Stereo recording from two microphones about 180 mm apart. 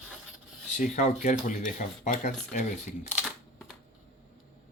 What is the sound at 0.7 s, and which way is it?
Speech, 45° left (ahead or behind).